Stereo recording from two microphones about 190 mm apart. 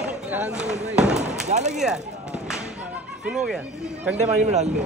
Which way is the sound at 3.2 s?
5° right (ahead or behind).